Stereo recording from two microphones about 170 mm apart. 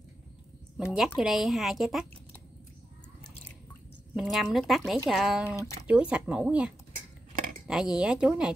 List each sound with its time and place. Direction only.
0.9 s speech: centre (ahead or behind)
4.1 s speech: 5° right (ahead or behind)